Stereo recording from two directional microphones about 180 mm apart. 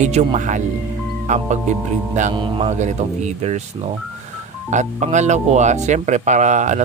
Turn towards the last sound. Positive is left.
turn(degrees=-40)  # may be behind; listen again after turning